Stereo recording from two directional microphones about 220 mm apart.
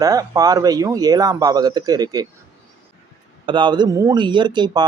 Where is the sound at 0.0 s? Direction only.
15° right (ahead or behind).